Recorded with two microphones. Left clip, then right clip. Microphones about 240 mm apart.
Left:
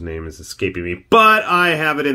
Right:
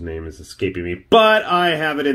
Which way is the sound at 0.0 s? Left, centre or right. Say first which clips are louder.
Left 1 dB; centre.